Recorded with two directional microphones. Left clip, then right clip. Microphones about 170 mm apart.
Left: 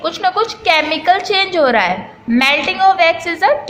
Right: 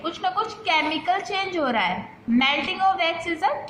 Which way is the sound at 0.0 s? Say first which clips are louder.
Left 9 dB; 35° left (ahead or behind).